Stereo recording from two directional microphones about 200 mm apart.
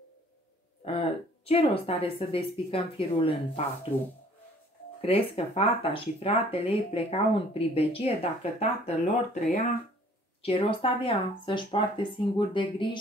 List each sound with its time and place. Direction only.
0.8 s speech: 30° left (ahead or behind)
5.0 s speech: 30° left (ahead or behind)
10.4 s speech: 25° left (ahead or behind)